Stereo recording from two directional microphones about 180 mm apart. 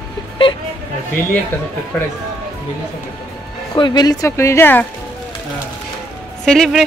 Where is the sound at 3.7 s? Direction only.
25° left (ahead or behind).